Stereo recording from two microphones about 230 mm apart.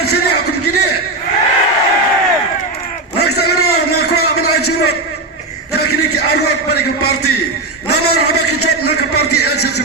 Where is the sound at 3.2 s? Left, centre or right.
Left.